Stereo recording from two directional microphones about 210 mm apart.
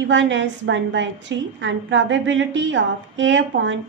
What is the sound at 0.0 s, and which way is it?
A woman's voice, 60° right (ahead or behind).